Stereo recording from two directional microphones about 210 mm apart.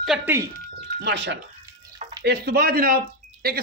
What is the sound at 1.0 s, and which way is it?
Speech, 55° right (ahead or behind).